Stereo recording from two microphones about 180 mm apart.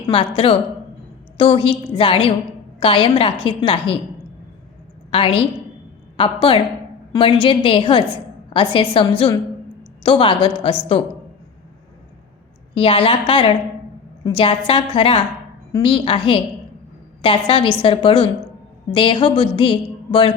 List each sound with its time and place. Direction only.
0.1 s a woman's voice: 30° left (ahead or behind)
5.1 s a woman's voice: 30° left (ahead or behind)
12.7 s a woman's voice: 30° left (ahead or behind)